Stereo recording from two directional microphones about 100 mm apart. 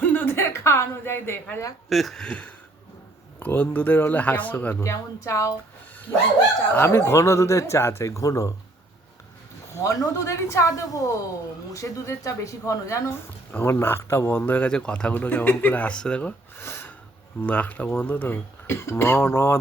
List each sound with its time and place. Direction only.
0.0 s speech: 15° left (ahead or behind)
1.9 s speech: centre (ahead or behind); by 4.8 s 15° left (ahead or behind)
4.8 s speech: 30° left (ahead or behind)
9.7 s speech: 35° left (ahead or behind); by 14.7 s 20° left (ahead or behind)
14.7 s speech: 10° left (ahead or behind)
16.6 s a sound: 25° left (ahead or behind)
17.4 s speech: 15° left (ahead or behind)